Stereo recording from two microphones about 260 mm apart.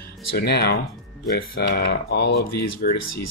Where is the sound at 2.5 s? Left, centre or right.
Left.